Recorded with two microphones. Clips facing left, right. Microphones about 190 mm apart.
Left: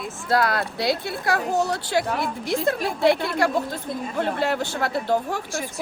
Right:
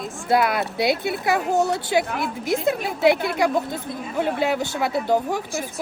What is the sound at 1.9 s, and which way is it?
Speech, 10° right (ahead or behind).